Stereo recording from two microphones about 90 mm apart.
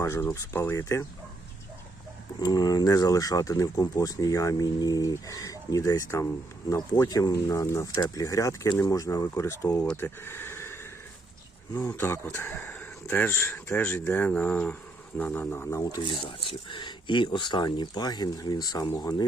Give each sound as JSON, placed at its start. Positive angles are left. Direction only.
{"t": 0.0, "sound": "speech", "side_deg": 30}
{"t": 2.4, "sound": "speech", "side_deg": 50}
{"t": 10.0, "sound": "speech", "side_deg": 25}
{"t": 11.9, "sound": "speech", "side_deg": 25}
{"t": 16.0, "sound": "speech", "side_deg": 60}